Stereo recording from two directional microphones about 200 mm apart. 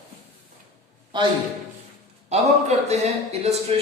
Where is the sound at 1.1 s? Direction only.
25° right (ahead or behind).